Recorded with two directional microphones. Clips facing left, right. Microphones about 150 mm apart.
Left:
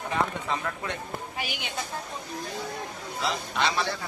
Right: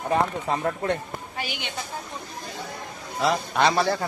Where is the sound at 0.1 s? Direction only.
40° right (ahead or behind).